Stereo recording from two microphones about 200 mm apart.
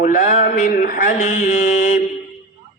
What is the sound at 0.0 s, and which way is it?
Mantra, 40° left (ahead or behind).